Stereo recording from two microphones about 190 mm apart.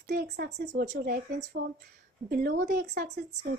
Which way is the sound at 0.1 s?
55° right (ahead or behind).